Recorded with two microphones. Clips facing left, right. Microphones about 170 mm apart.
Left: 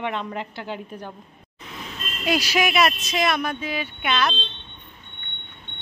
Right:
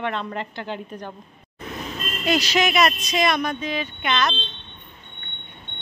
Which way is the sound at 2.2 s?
10° left (ahead or behind).